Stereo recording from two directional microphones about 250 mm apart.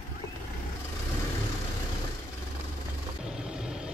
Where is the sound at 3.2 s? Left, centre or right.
Centre.